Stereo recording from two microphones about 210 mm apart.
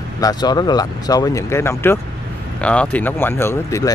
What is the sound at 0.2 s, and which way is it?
Speech, 20° left (ahead or behind).